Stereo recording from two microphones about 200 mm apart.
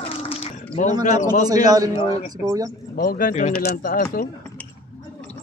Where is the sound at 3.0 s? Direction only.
45° left (ahead or behind).